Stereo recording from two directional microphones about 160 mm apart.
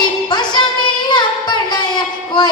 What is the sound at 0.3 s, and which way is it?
Music, 25° left (ahead or behind).